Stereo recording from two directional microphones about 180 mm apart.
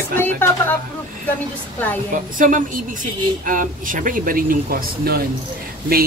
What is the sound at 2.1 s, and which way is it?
A man's voice, 45° right (ahead or behind).